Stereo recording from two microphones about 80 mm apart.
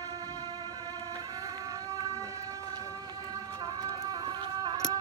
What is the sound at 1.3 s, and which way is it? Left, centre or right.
Vehicle, right.